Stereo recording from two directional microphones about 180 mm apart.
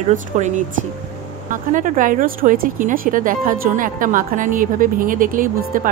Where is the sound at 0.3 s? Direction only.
40° right (ahead or behind).